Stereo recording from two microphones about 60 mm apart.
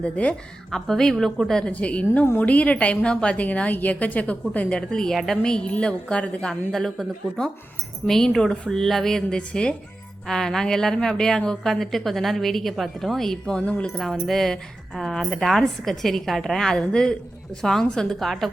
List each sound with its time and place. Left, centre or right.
0.0 s a woman's voice: centre
0.7 s a woman's voice: centre
1.7 s a woman's voice: left
4.8 s a woman's voice: centre
13.6 s a woman's voice: left
14.0 s a woman's voice: centre